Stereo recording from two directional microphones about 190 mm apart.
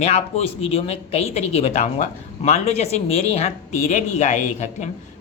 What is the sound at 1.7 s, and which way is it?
Speech, 35° left (ahead or behind).